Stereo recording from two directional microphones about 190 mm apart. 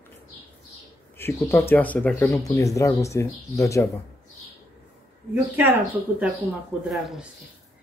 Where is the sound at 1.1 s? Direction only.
10° left (ahead or behind).